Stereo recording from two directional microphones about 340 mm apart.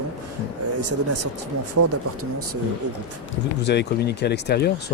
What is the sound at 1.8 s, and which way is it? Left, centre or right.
Mantra, right.